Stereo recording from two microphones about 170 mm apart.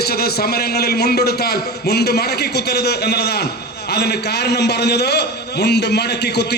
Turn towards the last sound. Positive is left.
turn(degrees=75)  # may be behind; listen again after turning